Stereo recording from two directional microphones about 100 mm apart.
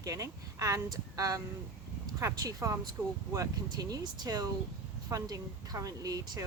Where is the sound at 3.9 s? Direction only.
40° right (ahead or behind).